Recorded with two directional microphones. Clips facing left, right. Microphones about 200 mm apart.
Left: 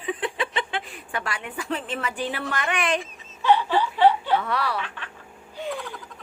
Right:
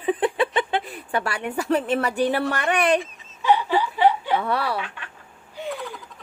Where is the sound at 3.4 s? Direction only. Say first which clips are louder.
Even; 15° right (ahead or behind).